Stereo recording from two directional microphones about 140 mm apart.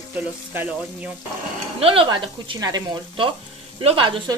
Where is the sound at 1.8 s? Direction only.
40° right (ahead or behind).